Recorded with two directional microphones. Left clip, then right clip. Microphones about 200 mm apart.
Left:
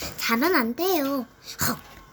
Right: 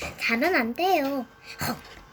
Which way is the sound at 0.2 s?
35° left (ahead or behind).